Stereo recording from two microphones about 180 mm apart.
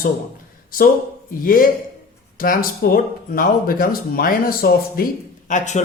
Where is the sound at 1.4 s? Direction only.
50° left (ahead or behind).